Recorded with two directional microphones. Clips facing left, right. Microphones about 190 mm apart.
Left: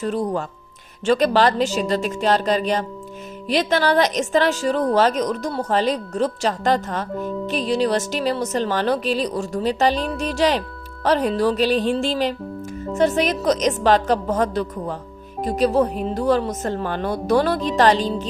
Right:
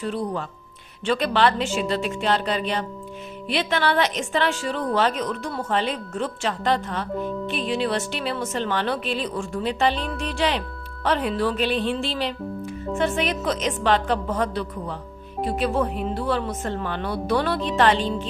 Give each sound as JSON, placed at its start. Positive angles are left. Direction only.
{"t": 0.0, "sound": "speech", "side_deg": 45}
{"t": 7.1, "sound": "music", "side_deg": 5}
{"t": 7.4, "sound": "speech", "side_deg": 40}